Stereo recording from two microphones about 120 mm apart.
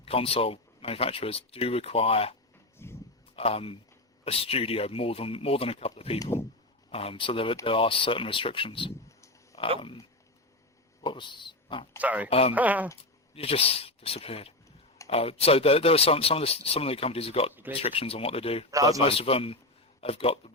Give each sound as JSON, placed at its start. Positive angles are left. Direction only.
{"t": 0.0, "sound": "speech", "side_deg": 55}
{"t": 2.7, "sound": "a sound", "side_deg": 20}
{"t": 3.3, "sound": "speech", "side_deg": 55}
{"t": 9.0, "sound": "a sound", "side_deg": 25}
{"t": 11.0, "sound": "speech", "side_deg": 40}
{"t": 11.9, "sound": "speech", "side_deg": -15}
{"t": 12.3, "sound": "speech", "side_deg": 55}
{"t": 12.5, "sound": "speech", "side_deg": -15}
{"t": 13.3, "sound": "speech", "side_deg": 55}
{"t": 17.5, "sound": "speech", "side_deg": -15}
{"t": 17.8, "sound": "speech", "side_deg": 55}
{"t": 18.7, "sound": "a man's voice", "side_deg": -30}
{"t": 19.0, "sound": "speech", "side_deg": 50}